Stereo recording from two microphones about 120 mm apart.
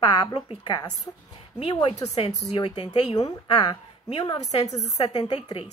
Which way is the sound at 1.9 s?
65° left (ahead or behind).